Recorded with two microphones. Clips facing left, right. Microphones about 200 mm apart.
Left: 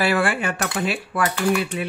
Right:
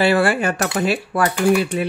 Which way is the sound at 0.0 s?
35° right (ahead or behind).